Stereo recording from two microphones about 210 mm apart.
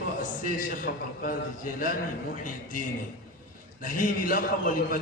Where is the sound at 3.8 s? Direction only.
40° left (ahead or behind).